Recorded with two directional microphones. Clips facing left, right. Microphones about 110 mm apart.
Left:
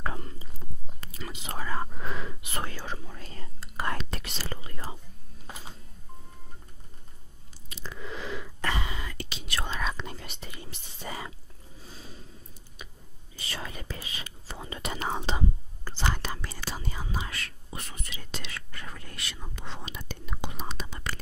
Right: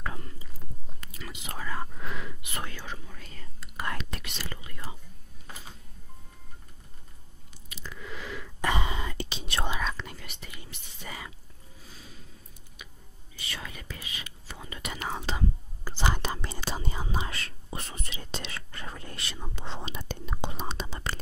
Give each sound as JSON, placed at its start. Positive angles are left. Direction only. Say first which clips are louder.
{"t": 0.0, "sound": "whispering", "louder": "left 3 dB", "side_deg": 35}
{"t": 7.7, "sound": "squish", "louder": "left 2 dB", "side_deg": 30}
{"t": 8.5, "sound": "whispering", "louder": "right 5 dB", "side_deg": -20}
{"t": 9.9, "sound": "whispering", "louder": "left 2 dB", "side_deg": 30}
{"t": 11.8, "sound": "a sound", "louder": "left 4 dB", "side_deg": 30}
{"t": 13.4, "sound": "whispering", "louder": "left 2 dB", "side_deg": 35}
{"t": 15.8, "sound": "whispering", "louder": "right 2 dB", "side_deg": -15}